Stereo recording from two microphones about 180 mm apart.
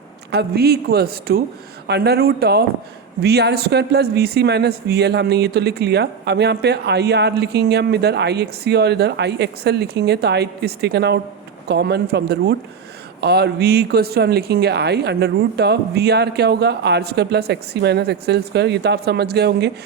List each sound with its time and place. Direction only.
0.3 s speech: 65° right (ahead or behind)